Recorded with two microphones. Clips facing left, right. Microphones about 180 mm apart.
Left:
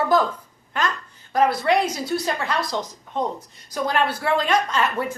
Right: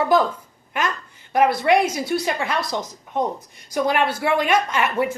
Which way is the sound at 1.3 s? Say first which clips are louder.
Right 2 dB; 10° right (ahead or behind).